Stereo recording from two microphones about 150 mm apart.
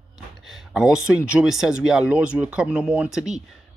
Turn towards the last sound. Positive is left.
turn(degrees=-5)  # may be behind; listen again after turning